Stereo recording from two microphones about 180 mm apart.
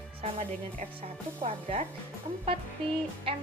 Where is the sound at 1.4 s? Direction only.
40° right (ahead or behind).